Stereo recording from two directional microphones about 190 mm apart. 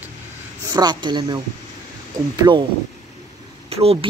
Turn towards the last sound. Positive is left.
turn(degrees=-30)  # may be behind; listen again after turning